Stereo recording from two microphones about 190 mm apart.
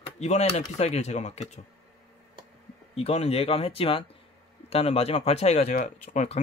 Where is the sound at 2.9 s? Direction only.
35° left (ahead or behind).